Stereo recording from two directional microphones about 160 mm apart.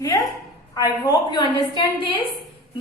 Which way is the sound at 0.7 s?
25° left (ahead or behind).